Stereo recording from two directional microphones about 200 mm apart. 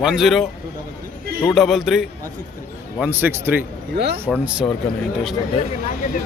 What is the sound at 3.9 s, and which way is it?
Speech, 55° right (ahead or behind).